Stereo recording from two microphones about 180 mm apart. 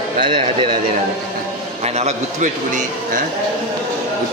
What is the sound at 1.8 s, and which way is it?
A man's voice, 35° right (ahead or behind).